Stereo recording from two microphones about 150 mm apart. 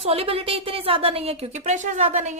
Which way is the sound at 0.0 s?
40° right (ahead or behind).